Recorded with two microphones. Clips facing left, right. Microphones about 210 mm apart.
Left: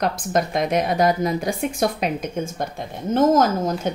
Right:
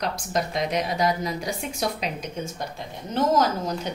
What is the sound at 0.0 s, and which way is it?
A woman's voice, 50° left (ahead or behind).